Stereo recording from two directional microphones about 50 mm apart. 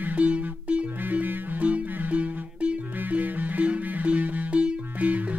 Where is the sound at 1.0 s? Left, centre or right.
Right.